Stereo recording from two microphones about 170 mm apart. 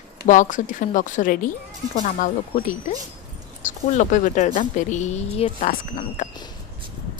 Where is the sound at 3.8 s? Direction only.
45° left (ahead or behind).